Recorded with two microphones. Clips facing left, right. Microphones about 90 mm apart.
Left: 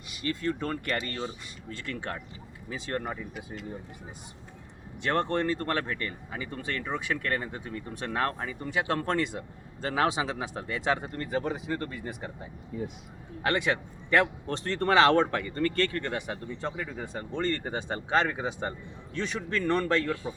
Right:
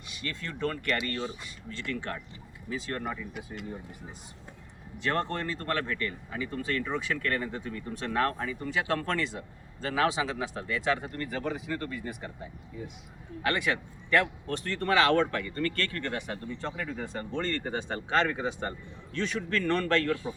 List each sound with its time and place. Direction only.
0.3 s a man's voice: 15° left (ahead or behind); by 3.2 s 30° left (ahead or behind)
3.3 s speech: 60° right (ahead or behind)
5.0 s a man's voice: 20° left (ahead or behind)
12.7 s speech: 50° left (ahead or behind)
13.4 s a man's voice: 25° left (ahead or behind)